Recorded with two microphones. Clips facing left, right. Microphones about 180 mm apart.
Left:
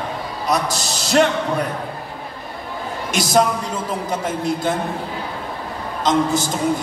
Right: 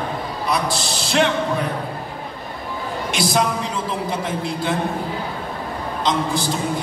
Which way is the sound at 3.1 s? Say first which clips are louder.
Left 3 dB; 45° left (ahead or behind).